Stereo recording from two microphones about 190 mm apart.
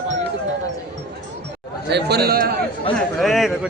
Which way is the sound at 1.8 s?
60° right (ahead or behind).